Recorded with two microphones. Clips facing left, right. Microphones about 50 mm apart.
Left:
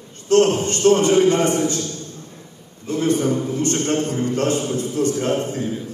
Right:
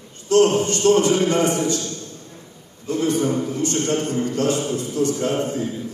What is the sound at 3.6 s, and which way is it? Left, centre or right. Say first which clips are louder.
Speech: left 1 dB; left.